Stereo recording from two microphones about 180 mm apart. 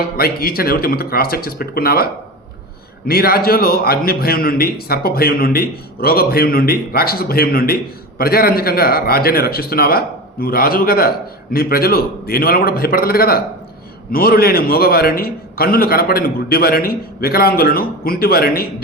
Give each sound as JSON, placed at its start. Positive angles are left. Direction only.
{"t": 0.2, "sound": "a man's voice", "side_deg": 55}
{"t": 3.1, "sound": "a man's voice", "side_deg": 55}